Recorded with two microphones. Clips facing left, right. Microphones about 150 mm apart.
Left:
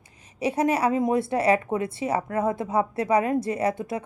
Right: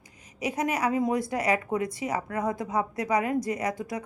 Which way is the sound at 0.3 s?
30° left (ahead or behind).